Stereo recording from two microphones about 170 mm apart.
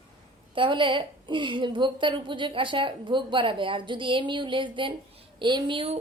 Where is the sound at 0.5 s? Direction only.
30° right (ahead or behind).